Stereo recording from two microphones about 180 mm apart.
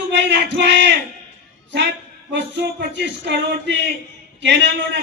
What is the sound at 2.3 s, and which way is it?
A man's voice, 75° right (ahead or behind).